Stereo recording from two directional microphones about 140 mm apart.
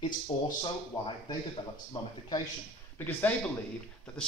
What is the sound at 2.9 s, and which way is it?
Speech, 15° left (ahead or behind).